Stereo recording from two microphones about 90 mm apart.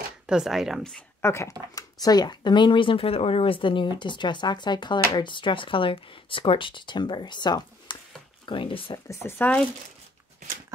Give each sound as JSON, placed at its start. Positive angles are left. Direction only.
{"t": 0.3, "sound": "speech", "side_deg": -5}
{"t": 1.2, "sound": "speech", "side_deg": 30}
{"t": 1.8, "sound": "speech", "side_deg": 45}
{"t": 8.5, "sound": "speech", "side_deg": 70}
{"t": 9.0, "sound": "speech", "side_deg": 35}
{"t": 9.4, "sound": "speech", "side_deg": 10}